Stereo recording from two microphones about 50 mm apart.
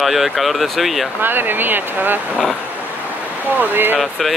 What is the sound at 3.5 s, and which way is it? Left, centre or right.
Speech, right.